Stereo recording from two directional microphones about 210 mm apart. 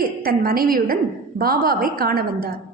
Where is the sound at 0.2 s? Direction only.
45° right (ahead or behind).